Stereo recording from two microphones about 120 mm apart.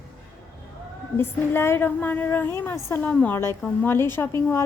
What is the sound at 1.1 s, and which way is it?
A woman's voice, 20° left (ahead or behind).